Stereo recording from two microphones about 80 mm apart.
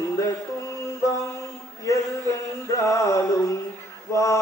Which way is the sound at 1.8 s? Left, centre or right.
Left.